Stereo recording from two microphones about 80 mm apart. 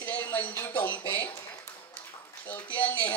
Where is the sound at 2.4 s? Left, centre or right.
Centre.